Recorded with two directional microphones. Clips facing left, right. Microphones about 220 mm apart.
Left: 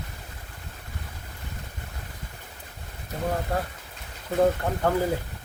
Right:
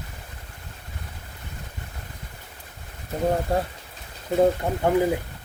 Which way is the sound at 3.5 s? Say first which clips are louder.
Right 4 dB; 25° right (ahead or behind).